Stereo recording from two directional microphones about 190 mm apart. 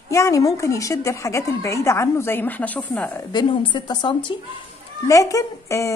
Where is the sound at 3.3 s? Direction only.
25° left (ahead or behind).